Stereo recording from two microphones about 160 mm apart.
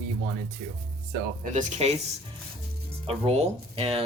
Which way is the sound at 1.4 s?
50° right (ahead or behind).